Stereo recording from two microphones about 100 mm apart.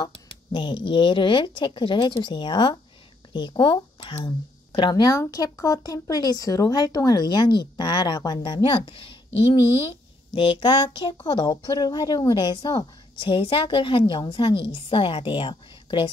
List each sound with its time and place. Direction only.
0.5 s a woman's voice: 50° left (ahead or behind)
13.3 s a woman's voice: 65° left (ahead or behind)